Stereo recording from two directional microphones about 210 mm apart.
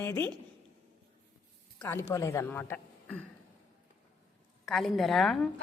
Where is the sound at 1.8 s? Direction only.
10° left (ahead or behind).